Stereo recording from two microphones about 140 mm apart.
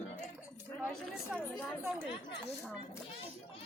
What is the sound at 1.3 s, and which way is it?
Speech, 5° right (ahead or behind).